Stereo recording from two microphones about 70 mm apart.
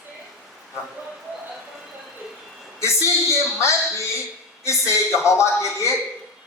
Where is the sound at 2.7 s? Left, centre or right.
Left.